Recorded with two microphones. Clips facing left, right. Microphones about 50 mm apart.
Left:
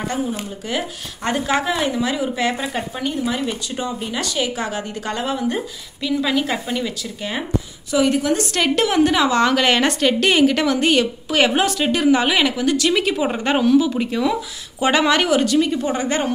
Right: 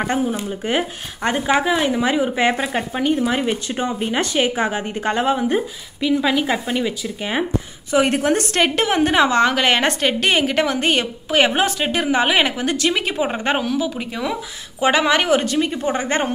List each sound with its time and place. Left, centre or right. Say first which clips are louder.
0.7 s speech: right 3 dB; right; by 1.9 s centre
1.9 s speech: right 3 dB; right
6.3 s speech: right 1 dB; centre
6.7 s speech: right 2 dB; centre
8.0 s a woman's voice: even; right
8.5 s speech: left 3 dB; right
9.5 s speech: left 1 dB; centre
13.6 s speech: left 6 dB; centre
15.1 s speech: left 1 dB; right